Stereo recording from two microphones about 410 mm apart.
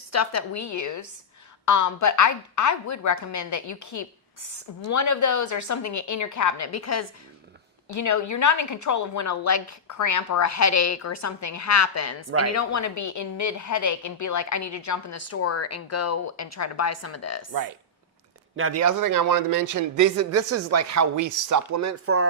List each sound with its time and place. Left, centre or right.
0.1 s a woman's voice: left
18.5 s speech: right